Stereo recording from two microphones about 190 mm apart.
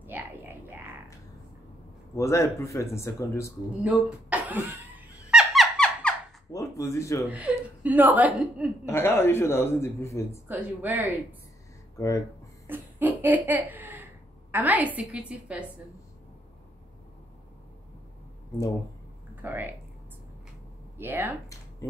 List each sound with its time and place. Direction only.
0.0 s a sound: 10° right (ahead or behind)
2.1 s a man's voice: 15° left (ahead or behind)
3.8 s a sound: 10° right (ahead or behind)
6.5 s speech: 15° left (ahead or behind)
7.2 s speech: 10° right (ahead or behind)
8.8 s a man's voice: 10° left (ahead or behind)
10.5 s speech: 10° right (ahead or behind)
12.6 s a sound: 10° right (ahead or behind)
19.4 s speech: 10° right (ahead or behind)
21.0 s speech: 10° right (ahead or behind)